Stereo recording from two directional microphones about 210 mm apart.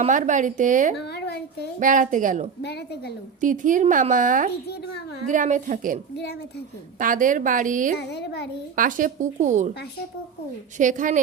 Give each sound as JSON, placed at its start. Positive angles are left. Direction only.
{"t": 0.0, "sound": "a woman's voice", "side_deg": -35}
{"t": 0.9, "sound": "a sound", "side_deg": 50}
{"t": 1.8, "sound": "a woman's voice", "side_deg": -40}
{"t": 2.6, "sound": "a child's voice", "side_deg": 50}
{"t": 3.4, "sound": "a woman's voice", "side_deg": -40}
{"t": 7.0, "sound": "a woman's voice", "side_deg": -40}
{"t": 7.9, "sound": "a child's voice", "side_deg": 50}
{"t": 8.7, "sound": "a woman's voice", "side_deg": -40}
{"t": 10.8, "sound": "a woman's voice", "side_deg": -35}